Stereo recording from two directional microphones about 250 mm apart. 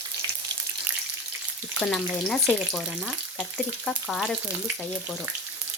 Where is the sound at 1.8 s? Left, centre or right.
Centre.